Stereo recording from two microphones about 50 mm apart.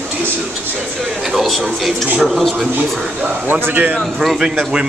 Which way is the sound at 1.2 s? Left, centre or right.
Centre.